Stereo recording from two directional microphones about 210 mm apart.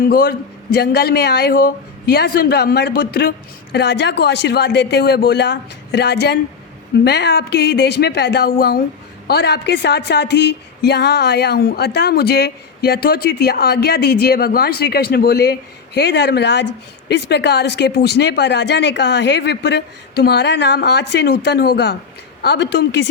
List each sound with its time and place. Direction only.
0.0 s a man's voice: 45° left (ahead or behind)